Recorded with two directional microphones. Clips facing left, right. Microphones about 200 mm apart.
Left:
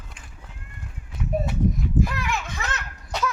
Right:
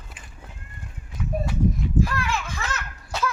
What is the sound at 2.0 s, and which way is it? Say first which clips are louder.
Children playing: right 1 dB; 20° left (ahead or behind).